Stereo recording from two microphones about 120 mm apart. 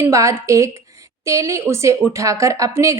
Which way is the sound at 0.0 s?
25° right (ahead or behind).